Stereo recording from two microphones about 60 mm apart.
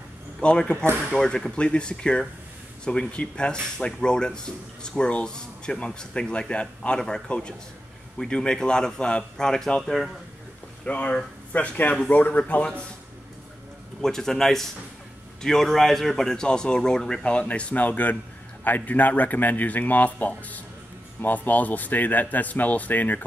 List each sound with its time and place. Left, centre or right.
0.4 s speech: centre
7.0 s speech: centre
10.9 s a man's voice: left
14.0 s a man's voice: centre; by 23.2 s left